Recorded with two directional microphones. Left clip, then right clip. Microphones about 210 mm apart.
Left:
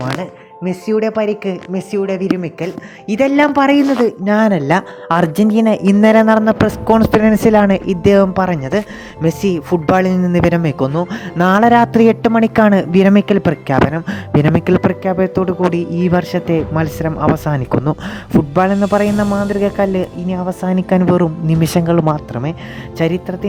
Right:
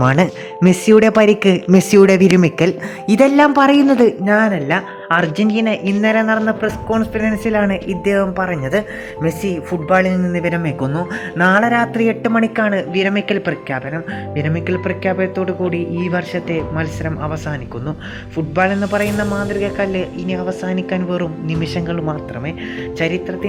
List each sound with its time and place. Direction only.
0.0 s speech: 20° right (ahead or behind)
2.6 s speech: 15° right (ahead or behind)
3.2 s speech: 10° left (ahead or behind)
4.3 s speech: 40° left (ahead or behind)
12.5 s speech: 50° left (ahead or behind)